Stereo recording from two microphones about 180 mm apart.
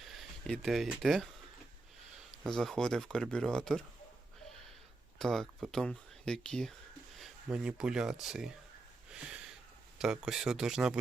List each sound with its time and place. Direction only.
0.1 s speech: centre (ahead or behind)
2.4 s speech: centre (ahead or behind)
5.2 s speech: centre (ahead or behind)
10.0 s speech: 5° right (ahead or behind)